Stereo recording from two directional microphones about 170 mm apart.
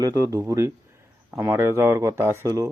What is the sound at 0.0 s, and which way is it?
Speech, 20° right (ahead or behind).